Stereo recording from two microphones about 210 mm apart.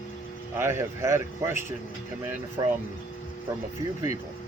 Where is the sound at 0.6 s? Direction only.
10° right (ahead or behind).